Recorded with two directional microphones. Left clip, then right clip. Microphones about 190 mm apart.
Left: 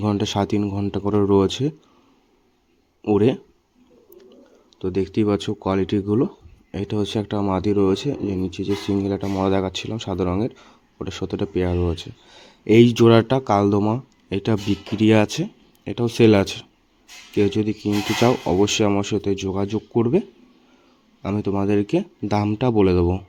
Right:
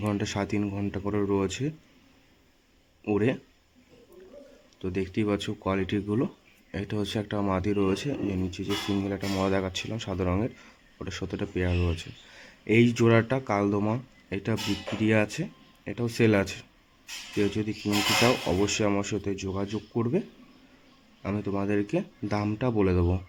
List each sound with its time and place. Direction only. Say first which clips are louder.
0.0 s speech: left 8 dB; 25° left (ahead or behind)
3.0 s speech: left 8 dB; 25° left (ahead or behind)
4.8 s speech: left 8 dB; 20° left (ahead or behind)